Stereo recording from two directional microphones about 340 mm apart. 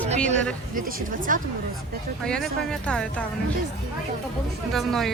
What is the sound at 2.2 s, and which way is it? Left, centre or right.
Speech, centre.